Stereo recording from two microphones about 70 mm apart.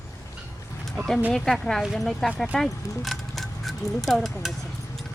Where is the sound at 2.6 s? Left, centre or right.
Centre.